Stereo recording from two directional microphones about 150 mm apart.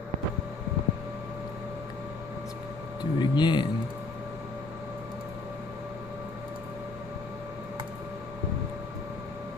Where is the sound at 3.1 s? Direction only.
30° left (ahead or behind).